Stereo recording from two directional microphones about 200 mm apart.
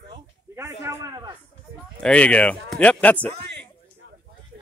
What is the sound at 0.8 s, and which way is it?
Speech, 20° right (ahead or behind).